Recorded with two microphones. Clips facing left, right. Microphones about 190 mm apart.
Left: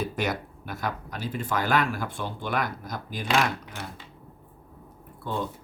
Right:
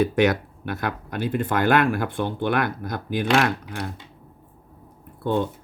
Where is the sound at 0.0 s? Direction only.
70° right (ahead or behind).